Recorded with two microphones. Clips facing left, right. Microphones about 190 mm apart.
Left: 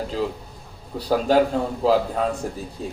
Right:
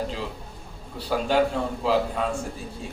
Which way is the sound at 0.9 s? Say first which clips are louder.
Left 4 dB; 40° left (ahead or behind).